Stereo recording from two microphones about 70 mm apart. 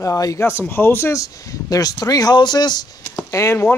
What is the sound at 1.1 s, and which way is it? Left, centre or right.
Speech, left.